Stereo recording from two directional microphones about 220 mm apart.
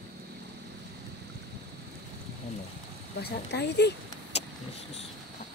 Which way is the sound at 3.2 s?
50° left (ahead or behind).